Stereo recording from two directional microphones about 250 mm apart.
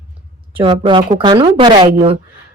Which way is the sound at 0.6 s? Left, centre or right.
Centre.